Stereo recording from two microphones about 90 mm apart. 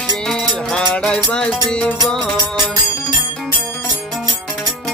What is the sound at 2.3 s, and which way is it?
Music, 50° right (ahead or behind).